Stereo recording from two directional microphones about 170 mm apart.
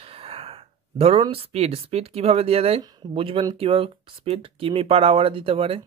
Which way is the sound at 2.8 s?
25° right (ahead or behind).